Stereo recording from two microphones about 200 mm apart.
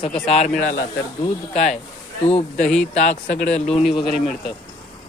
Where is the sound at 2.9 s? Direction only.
35° left (ahead or behind).